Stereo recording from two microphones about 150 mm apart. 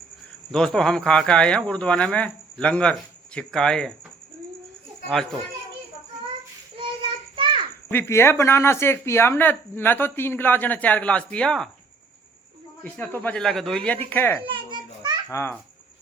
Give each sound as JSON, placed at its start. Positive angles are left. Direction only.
{"t": 0.5, "sound": "speech", "side_deg": 5}
{"t": 7.3, "sound": "insect", "side_deg": -35}
{"t": 7.9, "sound": "speech", "side_deg": 15}
{"t": 12.8, "sound": "speech", "side_deg": 10}
{"t": 14.4, "sound": "a sound", "side_deg": -35}
{"t": 15.3, "sound": "speech", "side_deg": 20}